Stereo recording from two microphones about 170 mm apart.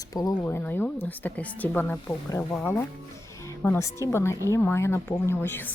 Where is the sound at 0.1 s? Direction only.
20° left (ahead or behind).